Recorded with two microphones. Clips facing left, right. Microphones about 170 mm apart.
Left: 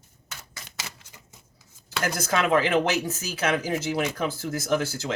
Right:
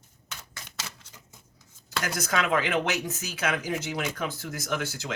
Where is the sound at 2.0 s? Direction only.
30° left (ahead or behind).